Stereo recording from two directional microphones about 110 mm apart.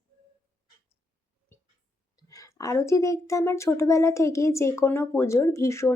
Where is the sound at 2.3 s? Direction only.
30° left (ahead or behind).